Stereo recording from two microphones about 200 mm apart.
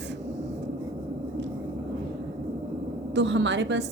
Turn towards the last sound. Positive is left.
turn(degrees=-65)  # may be behind; listen again after turning